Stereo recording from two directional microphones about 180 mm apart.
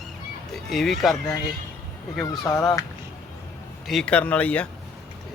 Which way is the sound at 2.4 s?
20° left (ahead or behind).